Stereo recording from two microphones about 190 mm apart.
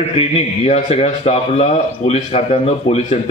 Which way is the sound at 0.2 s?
35° left (ahead or behind).